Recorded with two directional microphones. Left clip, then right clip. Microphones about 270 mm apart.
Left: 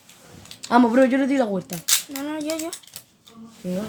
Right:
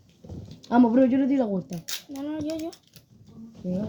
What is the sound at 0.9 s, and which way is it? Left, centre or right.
Speech, centre.